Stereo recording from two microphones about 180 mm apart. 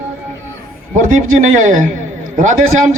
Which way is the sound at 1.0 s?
45° right (ahead or behind).